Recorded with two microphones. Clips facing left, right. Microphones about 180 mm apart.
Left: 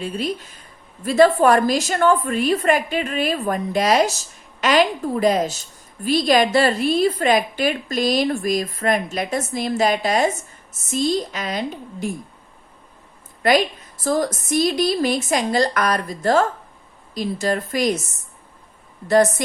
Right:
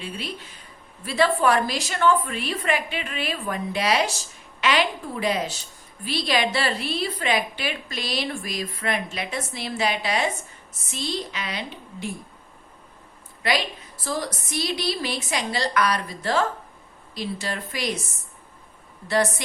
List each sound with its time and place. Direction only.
0.0 s a woman's voice: 40° left (ahead or behind)
13.4 s a woman's voice: 50° left (ahead or behind)
19.0 s a woman's voice: 45° left (ahead or behind)